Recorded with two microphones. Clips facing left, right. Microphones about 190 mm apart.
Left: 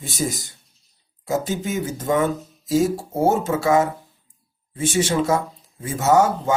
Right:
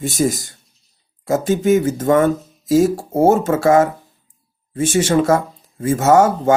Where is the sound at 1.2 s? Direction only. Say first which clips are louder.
Right 7 dB; 50° right (ahead or behind).